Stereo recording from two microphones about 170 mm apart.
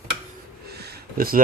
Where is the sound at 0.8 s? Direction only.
70° right (ahead or behind).